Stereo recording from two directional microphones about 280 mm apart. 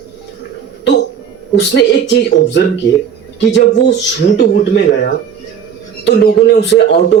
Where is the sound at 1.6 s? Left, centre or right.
Left.